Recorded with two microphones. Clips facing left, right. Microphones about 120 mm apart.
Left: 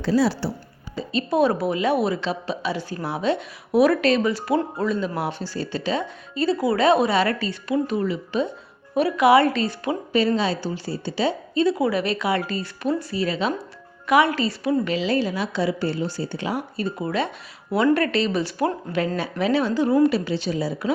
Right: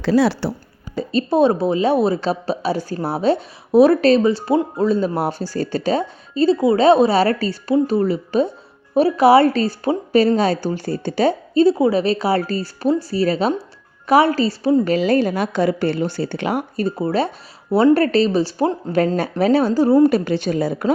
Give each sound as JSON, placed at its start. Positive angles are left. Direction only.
{"t": 0.0, "sound": "speech", "side_deg": -70}
{"t": 1.3, "sound": "a woman's voice", "side_deg": -25}
{"t": 14.9, "sound": "a woman's voice", "side_deg": -45}
{"t": 16.7, "sound": "a woman's voice", "side_deg": -35}
{"t": 18.9, "sound": "a woman's voice", "side_deg": -40}
{"t": 20.1, "sound": "a woman's voice", "side_deg": -50}